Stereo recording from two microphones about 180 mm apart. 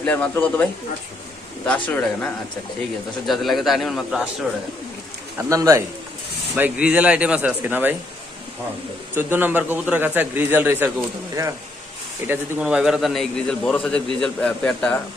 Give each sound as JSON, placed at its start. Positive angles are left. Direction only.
{"t": 0.0, "sound": "a man's voice", "side_deg": 10}
{"t": 5.5, "sound": "speech", "side_deg": -20}
{"t": 6.6, "sound": "speech", "side_deg": -5}
{"t": 9.1, "sound": "speech", "side_deg": -10}
{"t": 12.3, "sound": "a man's voice", "side_deg": -5}